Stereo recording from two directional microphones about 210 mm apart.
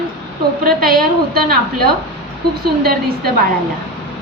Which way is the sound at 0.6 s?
45° right (ahead or behind).